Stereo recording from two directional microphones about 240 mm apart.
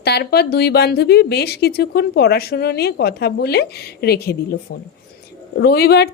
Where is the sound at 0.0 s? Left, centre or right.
Left.